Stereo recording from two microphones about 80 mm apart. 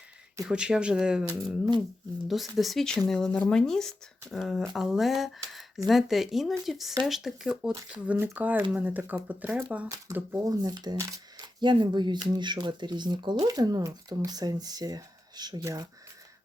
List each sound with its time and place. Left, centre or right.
0.4 s speech: centre
2.2 s speech: centre
8.0 s speech: right
10.4 s speech: right
11.6 s speech: right
15.6 s speech: right